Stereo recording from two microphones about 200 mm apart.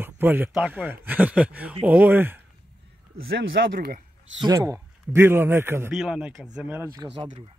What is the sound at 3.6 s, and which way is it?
Speech, 50° right (ahead or behind).